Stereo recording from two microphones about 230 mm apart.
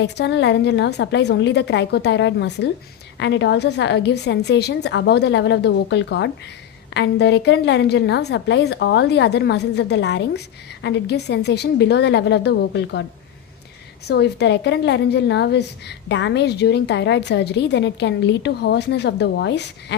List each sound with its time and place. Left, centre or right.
0.0 s a woman's voice: left
14.1 s a woman's voice: left